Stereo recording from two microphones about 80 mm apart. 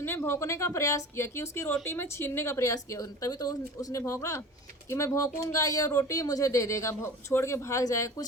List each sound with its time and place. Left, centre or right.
0.0 s speech: left